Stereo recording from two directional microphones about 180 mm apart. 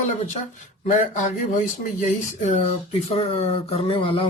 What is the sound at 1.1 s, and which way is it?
Speech, 45° left (ahead or behind).